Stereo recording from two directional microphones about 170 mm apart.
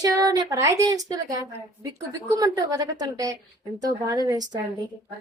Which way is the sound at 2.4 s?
20° right (ahead or behind).